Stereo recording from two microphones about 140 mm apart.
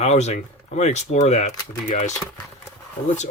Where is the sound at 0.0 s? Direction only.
55° left (ahead or behind).